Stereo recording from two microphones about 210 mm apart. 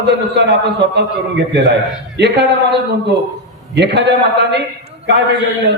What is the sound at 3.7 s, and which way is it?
Speech, 55° right (ahead or behind).